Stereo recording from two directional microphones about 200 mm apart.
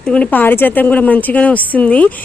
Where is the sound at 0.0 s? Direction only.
5° left (ahead or behind).